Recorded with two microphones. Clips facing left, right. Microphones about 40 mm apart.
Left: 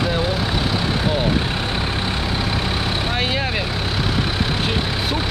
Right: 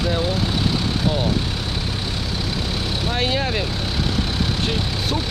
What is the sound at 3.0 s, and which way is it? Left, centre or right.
Vehicle, centre.